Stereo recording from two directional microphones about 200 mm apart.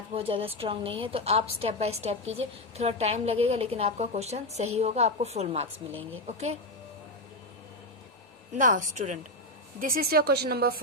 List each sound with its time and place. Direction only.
0.1 s a woman's voice: 25° right (ahead or behind)
8.5 s a woman's voice: 40° right (ahead or behind)